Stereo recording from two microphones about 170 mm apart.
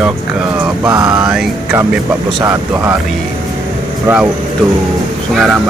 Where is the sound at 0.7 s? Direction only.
5° right (ahead or behind).